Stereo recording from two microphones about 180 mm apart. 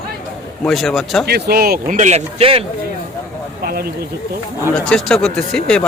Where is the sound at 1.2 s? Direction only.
60° right (ahead or behind).